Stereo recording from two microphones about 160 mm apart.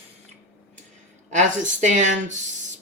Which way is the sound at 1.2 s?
50° right (ahead or behind).